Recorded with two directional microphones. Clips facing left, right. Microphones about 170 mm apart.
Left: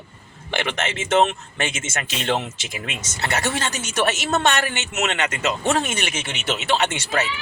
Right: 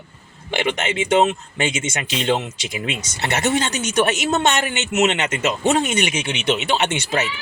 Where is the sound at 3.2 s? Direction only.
25° right (ahead or behind).